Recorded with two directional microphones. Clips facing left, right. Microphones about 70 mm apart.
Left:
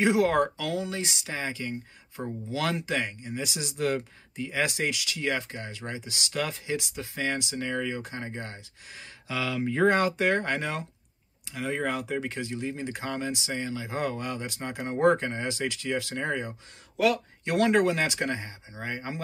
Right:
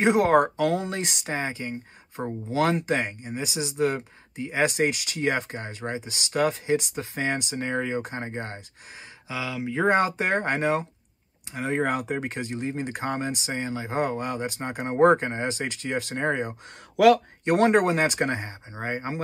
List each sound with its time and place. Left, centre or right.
0.0 s speech: right
3.7 s speech: right
4.4 s speech: right
8.9 s speech: centre
9.8 s speech: right
16.6 s speech: right
17.5 s speech: right